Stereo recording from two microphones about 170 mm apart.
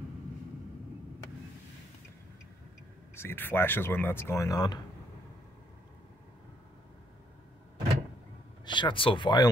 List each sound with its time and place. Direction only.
3.2 s speech: 15° left (ahead or behind)
8.6 s speech: 30° left (ahead or behind)